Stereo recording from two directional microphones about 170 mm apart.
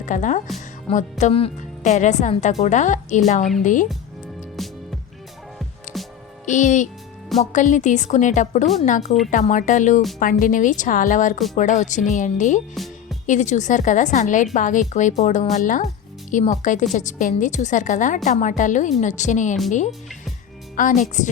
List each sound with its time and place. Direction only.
0.0 s speech: 45° left (ahead or behind)
0.9 s a woman's voice: 35° left (ahead or behind)
6.4 s a woman's voice: 45° left (ahead or behind)
12.7 s music: centre (ahead or behind)
13.2 s speech: 45° left (ahead or behind)
19.9 s speech: centre (ahead or behind)
20.8 s speech: 50° left (ahead or behind)